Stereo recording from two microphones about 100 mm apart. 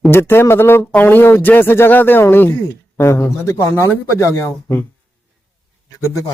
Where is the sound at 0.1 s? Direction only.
25° left (ahead or behind).